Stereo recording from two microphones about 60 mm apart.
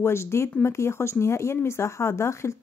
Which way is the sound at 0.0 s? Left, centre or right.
Left.